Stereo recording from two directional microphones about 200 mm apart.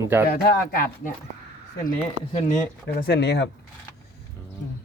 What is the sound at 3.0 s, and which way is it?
Speech, 55° left (ahead or behind).